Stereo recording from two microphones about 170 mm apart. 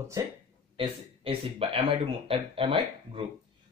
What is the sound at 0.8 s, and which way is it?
A man's voice, 35° right (ahead or behind).